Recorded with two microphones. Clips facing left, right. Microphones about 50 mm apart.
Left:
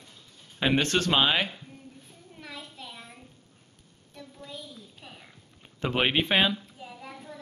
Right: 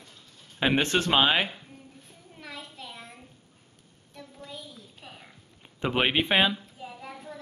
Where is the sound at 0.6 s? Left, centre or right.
Centre.